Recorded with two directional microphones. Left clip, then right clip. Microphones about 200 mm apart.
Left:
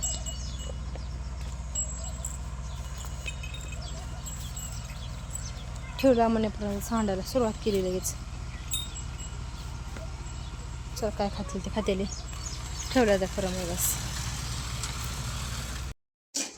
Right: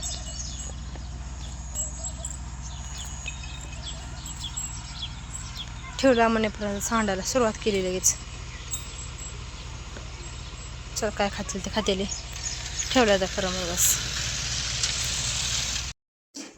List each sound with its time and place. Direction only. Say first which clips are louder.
6.0 s speech: right 3 dB; 10° right (ahead or behind)
10.9 s speech: right 4 dB; 5° right (ahead or behind)
12.4 s a sound: right 8 dB; 55° left (ahead or behind)
12.9 s speech: right 3 dB; centre (ahead or behind)
13.5 s vehicle: right 7 dB; 55° left (ahead or behind)